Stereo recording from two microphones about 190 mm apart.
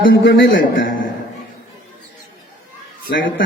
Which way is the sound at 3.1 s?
50° left (ahead or behind).